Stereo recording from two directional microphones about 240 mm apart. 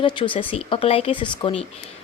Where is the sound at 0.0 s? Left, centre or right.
Left.